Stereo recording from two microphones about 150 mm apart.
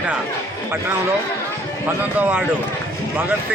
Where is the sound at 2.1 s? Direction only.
10° right (ahead or behind).